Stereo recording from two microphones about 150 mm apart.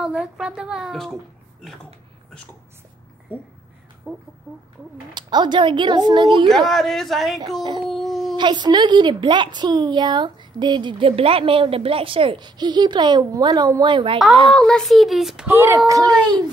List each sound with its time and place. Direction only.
0.0 s a woman's voice: 5° right (ahead or behind)
4.1 s speech: 15° right (ahead or behind)
5.1 s speech: 30° right (ahead or behind)
6.5 s a woman's voice: centre (ahead or behind)
7.8 s a sound: centre (ahead or behind)
8.4 s a woman's voice: 30° right (ahead or behind)
14.5 s a woman's voice: 5° left (ahead or behind)
15.4 s speech: 15° right (ahead or behind)